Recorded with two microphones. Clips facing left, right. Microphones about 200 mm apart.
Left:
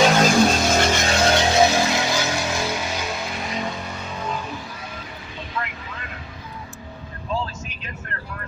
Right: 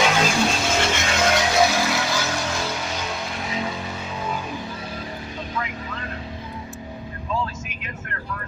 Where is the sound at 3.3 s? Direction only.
Centre (ahead or behind).